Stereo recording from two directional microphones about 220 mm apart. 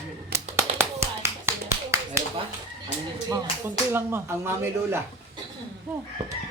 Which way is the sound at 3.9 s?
10° right (ahead or behind).